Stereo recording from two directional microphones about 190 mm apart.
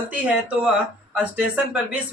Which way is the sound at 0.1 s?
10° right (ahead or behind).